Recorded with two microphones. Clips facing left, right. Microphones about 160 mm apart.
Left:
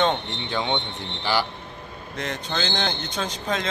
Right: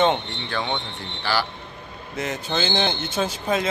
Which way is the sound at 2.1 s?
5° right (ahead or behind).